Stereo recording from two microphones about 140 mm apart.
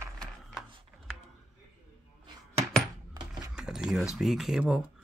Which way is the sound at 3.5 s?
5° right (ahead or behind).